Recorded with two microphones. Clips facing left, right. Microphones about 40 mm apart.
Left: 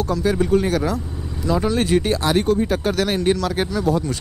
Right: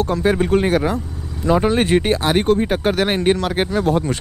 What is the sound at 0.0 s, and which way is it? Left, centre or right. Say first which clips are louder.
Speech: right 2 dB; right.